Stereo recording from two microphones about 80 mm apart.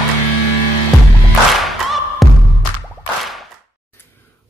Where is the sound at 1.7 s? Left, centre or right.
Centre.